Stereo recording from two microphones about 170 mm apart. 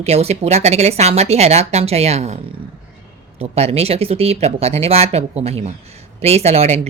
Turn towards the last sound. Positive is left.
turn(degrees=-35)  # may be behind; listen again after turning